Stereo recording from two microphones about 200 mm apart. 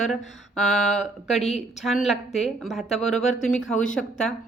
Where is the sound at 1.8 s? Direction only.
Centre (ahead or behind).